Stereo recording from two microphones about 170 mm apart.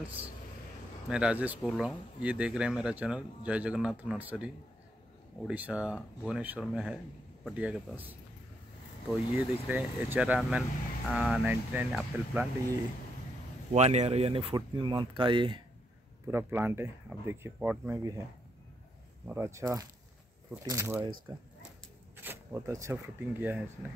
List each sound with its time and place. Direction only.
0.0 s speech: 10° right (ahead or behind)
5.5 s speech: 5° right (ahead or behind)
13.7 s speech: 40° right (ahead or behind)
16.3 s speech: 15° right (ahead or behind)
19.2 s speech: 15° right (ahead or behind)
22.1 s speech: 15° right (ahead or behind)